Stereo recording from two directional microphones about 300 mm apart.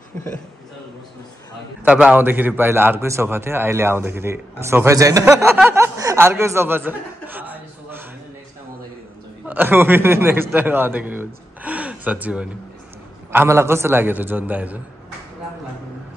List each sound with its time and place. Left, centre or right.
1.9 s a man's voice: centre
9.5 s a man's voice: centre